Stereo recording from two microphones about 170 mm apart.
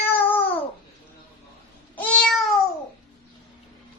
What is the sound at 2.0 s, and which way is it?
Meow, 5° left (ahead or behind).